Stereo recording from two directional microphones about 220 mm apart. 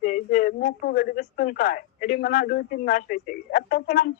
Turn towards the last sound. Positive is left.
turn(degrees=40)  # may be behind; listen again after turning